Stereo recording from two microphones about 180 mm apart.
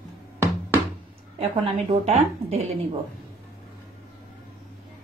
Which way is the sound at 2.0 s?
35° right (ahead or behind).